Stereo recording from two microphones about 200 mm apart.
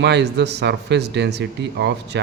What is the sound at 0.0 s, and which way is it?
Speech, 60° right (ahead or behind).